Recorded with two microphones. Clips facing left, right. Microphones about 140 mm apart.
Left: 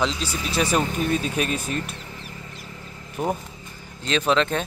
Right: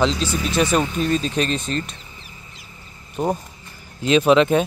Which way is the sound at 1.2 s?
10° left (ahead or behind).